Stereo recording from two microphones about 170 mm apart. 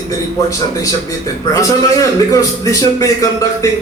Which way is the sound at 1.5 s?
20° left (ahead or behind).